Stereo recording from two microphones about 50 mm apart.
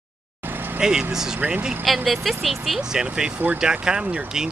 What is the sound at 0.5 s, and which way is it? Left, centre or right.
Vehicle, right.